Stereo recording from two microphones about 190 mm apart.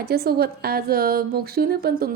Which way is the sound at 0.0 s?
55° right (ahead or behind).